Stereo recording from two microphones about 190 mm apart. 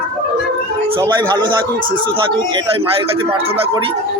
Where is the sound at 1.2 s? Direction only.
25° right (ahead or behind).